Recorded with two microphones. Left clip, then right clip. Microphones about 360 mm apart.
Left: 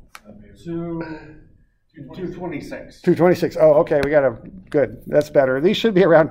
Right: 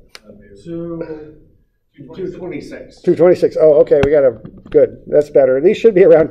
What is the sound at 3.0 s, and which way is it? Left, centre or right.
Speech, left.